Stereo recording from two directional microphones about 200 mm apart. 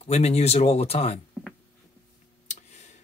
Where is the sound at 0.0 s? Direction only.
30° left (ahead or behind).